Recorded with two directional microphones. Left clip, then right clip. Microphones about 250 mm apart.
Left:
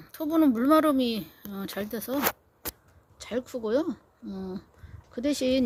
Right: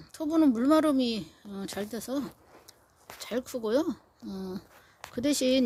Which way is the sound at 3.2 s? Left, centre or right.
Centre.